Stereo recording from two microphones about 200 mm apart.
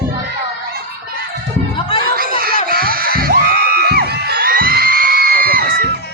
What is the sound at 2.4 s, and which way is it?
Music, 50° right (ahead or behind).